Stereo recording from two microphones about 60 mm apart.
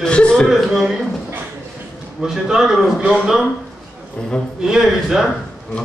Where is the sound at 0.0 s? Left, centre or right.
Centre.